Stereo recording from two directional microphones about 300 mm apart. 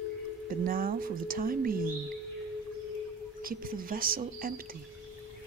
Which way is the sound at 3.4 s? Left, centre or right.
Right.